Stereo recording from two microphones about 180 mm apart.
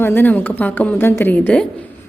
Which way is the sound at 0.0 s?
10° left (ahead or behind).